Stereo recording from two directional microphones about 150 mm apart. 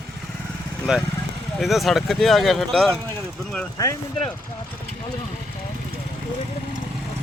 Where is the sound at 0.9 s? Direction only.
5° right (ahead or behind).